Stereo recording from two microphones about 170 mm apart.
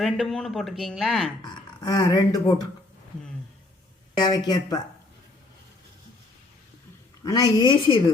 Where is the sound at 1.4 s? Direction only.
25° left (ahead or behind).